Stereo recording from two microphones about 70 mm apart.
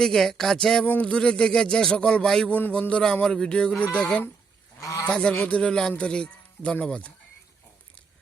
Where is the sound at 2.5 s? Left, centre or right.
Left.